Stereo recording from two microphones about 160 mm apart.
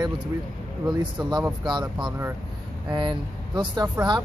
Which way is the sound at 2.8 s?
25° right (ahead or behind).